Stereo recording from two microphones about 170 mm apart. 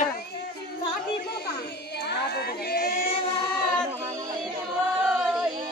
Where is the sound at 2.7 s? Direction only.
75° left (ahead or behind).